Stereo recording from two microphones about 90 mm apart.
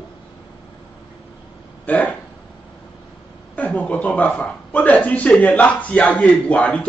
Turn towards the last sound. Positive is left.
turn(degrees=15)  # may be behind; listen again after turning